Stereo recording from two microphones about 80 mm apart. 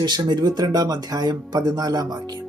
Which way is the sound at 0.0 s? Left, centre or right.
Right.